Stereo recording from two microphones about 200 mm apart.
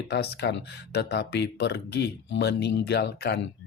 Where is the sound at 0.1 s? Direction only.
55° left (ahead or behind).